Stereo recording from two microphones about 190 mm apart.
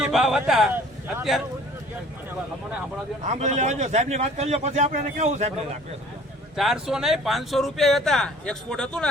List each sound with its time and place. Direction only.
0.0 s speech: centre (ahead or behind)
3.2 s a man's voice: 40° right (ahead or behind)
6.6 s speech: centre (ahead or behind)